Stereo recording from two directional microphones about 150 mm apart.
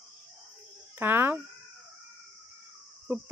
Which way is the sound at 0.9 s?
15° right (ahead or behind).